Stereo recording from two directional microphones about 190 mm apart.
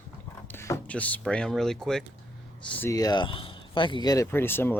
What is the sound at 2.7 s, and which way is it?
Speech, 15° left (ahead or behind).